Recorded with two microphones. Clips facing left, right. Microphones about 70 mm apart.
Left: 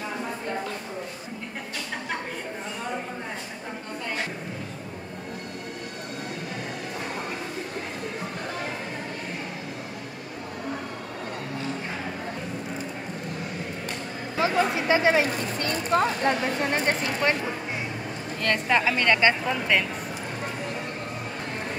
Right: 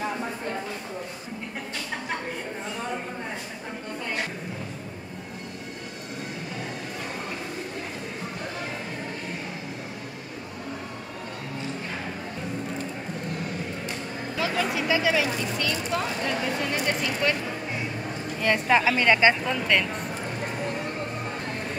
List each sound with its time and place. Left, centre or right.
14.3 s speech: left
18.4 s a woman's voice: centre
19.4 s speech: centre